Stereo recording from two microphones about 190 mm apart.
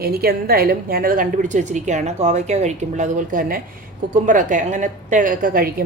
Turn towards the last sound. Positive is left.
turn(degrees=-50)  # may be behind; listen again after turning